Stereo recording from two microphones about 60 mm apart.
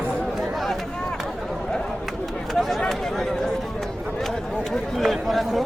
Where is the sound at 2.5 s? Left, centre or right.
Centre.